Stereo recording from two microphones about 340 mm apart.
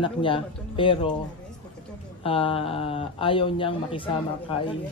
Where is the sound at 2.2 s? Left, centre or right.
Centre.